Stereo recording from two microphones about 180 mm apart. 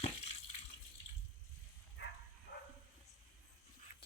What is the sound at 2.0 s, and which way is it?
Dog, 80° left.